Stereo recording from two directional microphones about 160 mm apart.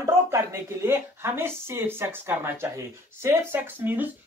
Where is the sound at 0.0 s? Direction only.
20° right (ahead or behind).